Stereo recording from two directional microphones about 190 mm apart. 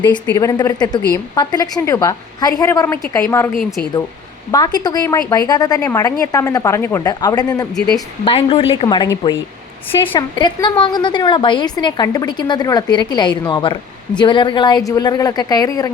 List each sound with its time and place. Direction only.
0.3 s a woman's voice: 15° left (ahead or behind)
3.6 s speech: centre (ahead or behind)
4.5 s a woman's voice: 20° left (ahead or behind)